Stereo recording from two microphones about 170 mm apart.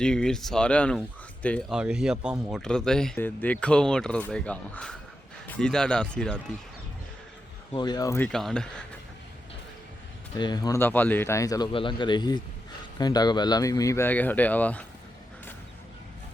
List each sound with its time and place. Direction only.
0.0 s speech: 5° left (ahead or behind)
1.7 s speech: 5° right (ahead or behind)
7.7 s speech: 25° left (ahead or behind)
8.3 s speech: centre (ahead or behind)
10.3 s speech: 25° left (ahead or behind); by 14.8 s 10° left (ahead or behind)